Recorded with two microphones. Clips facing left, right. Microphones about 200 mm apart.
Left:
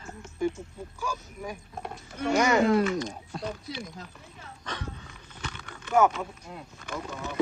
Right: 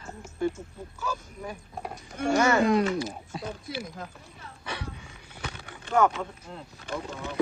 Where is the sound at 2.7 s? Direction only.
10° right (ahead or behind).